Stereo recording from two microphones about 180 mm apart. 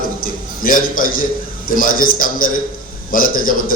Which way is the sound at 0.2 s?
50° left (ahead or behind).